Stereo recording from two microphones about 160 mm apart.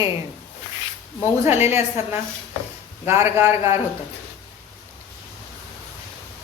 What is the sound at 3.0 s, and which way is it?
Speech, 15° right (ahead or behind).